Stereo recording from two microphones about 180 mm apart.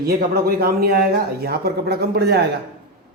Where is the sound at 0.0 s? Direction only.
55° right (ahead or behind).